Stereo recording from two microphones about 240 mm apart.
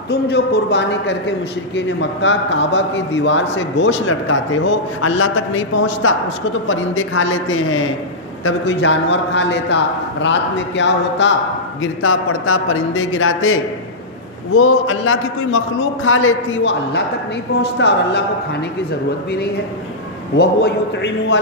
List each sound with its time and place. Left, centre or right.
0.1 s a man's voice: left
10.8 s a man's voice: left
20.3 s a man's voice: left